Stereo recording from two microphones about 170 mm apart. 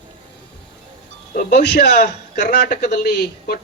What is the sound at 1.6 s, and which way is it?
Speech, 80° left.